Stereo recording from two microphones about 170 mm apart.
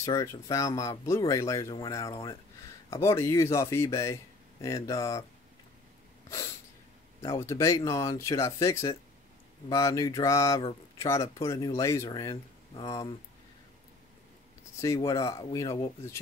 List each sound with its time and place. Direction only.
0.0 s speech: 20° left (ahead or behind)
7.2 s a man's voice: 35° left (ahead or behind)
7.4 s speech: 20° left (ahead or behind)
14.8 s speech: 20° left (ahead or behind)